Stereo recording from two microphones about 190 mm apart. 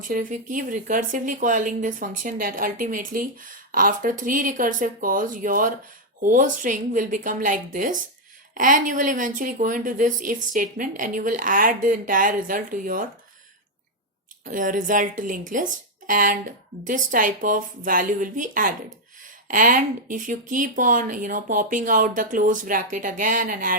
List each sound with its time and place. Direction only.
0.0 s speech: 45° right (ahead or behind)
14.4 s speech: 45° right (ahead or behind)